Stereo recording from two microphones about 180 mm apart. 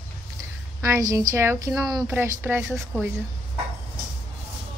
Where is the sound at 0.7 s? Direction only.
15° right (ahead or behind).